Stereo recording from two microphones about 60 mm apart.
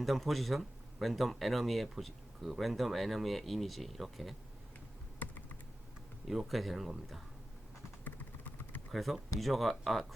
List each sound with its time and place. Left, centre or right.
0.0 s speech: centre
6.2 s speech: centre
8.0 s vehicle: left
8.9 s speech: centre